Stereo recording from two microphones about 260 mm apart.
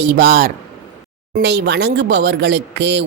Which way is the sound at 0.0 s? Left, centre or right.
Right.